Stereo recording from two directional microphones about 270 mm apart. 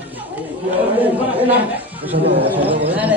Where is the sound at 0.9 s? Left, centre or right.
Centre.